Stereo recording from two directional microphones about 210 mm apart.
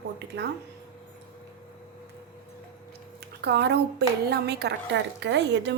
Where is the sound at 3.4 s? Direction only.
55° right (ahead or behind).